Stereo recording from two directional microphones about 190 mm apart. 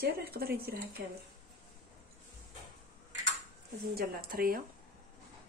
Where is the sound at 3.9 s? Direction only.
50° right (ahead or behind).